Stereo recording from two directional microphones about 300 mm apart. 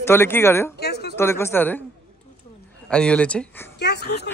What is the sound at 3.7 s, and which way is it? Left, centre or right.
Speech, left.